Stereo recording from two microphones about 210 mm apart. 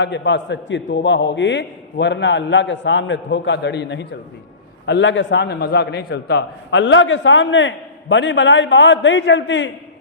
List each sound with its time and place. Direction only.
0.0 s a man's voice: 60° left (ahead or behind)